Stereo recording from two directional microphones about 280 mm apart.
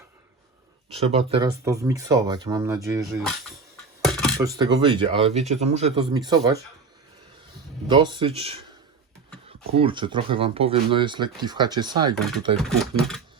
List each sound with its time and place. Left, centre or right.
0.9 s speech: right
4.0 s a sound: centre
4.4 s speech: centre
7.9 s speech: centre
9.7 s speech: centre
13.0 s a sound: centre